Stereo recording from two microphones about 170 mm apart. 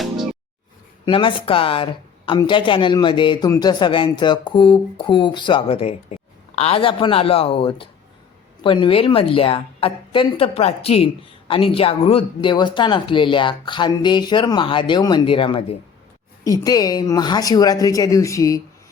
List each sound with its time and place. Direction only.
1.0 s a woman's voice: 30° left (ahead or behind)
16.4 s a woman's voice: 20° left (ahead or behind)